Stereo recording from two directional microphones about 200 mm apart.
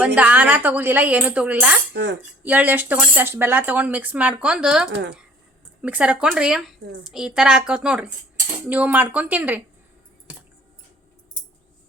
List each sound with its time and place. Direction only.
0.0 s speech: 5° right (ahead or behind)
1.9 s cutlery: 60° right (ahead or behind)
2.4 s a woman's voice: 10° right (ahead or behind)